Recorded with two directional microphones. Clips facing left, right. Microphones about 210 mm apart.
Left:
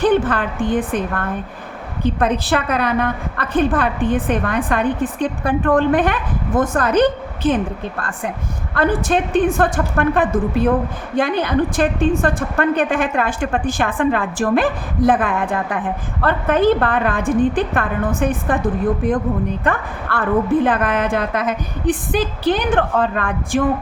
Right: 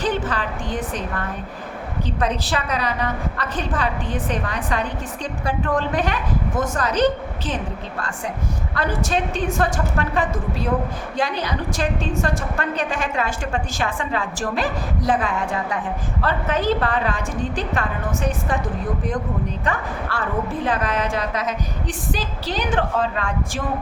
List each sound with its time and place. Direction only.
0.0 s a woman's voice: 55° left (ahead or behind)
8.7 s a woman's voice: 55° left (ahead or behind)
19.6 s a woman's voice: 55° left (ahead or behind)